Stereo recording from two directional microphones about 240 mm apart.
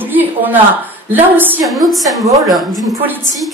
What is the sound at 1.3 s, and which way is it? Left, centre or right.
A woman's voice, centre.